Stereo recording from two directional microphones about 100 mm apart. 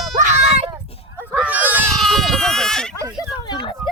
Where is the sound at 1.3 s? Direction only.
15° right (ahead or behind).